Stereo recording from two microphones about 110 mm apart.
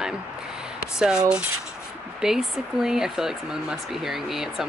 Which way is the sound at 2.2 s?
5° right (ahead or behind).